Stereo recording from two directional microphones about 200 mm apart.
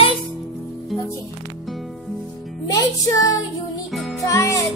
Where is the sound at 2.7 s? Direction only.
20° left (ahead or behind).